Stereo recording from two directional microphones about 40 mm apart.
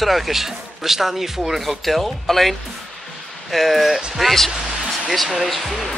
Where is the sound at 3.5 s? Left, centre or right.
Centre.